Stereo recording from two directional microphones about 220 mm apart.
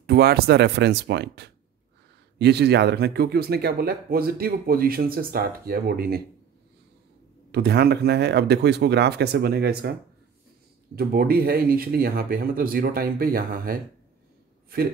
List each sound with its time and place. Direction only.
0.0 s speech: 45° right (ahead or behind)
7.5 s speech: 50° right (ahead or behind)
11.0 s speech: 45° right (ahead or behind)